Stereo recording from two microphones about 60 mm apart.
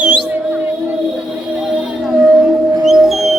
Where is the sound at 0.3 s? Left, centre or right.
Right.